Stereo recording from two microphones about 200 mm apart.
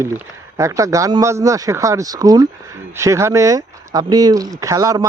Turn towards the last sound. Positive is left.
turn(degrees=-15)  # may be behind; listen again after turning